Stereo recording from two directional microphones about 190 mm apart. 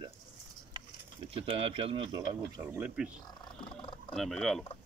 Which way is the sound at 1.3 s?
30° right (ahead or behind).